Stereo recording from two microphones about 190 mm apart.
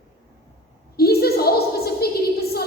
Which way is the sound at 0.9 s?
55° left (ahead or behind).